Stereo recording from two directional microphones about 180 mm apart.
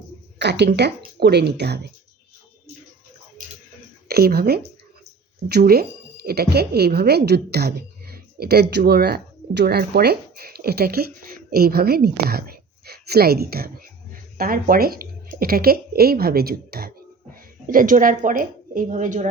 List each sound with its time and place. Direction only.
0.3 s speech: 70° right (ahead or behind)
4.1 s a woman's voice: 60° right (ahead or behind); by 19.3 s 45° right (ahead or behind)